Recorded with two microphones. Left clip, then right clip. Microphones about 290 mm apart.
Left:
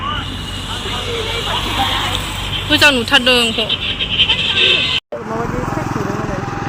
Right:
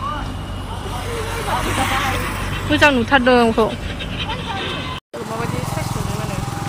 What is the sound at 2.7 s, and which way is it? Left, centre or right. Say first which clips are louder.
Speech: left 3 dB; centre.